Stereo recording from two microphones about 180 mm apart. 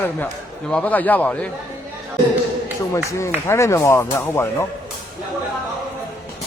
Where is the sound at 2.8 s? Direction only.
15° left (ahead or behind).